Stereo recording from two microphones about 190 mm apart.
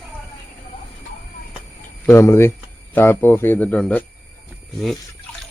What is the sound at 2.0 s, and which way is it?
Speech, 15° left (ahead or behind).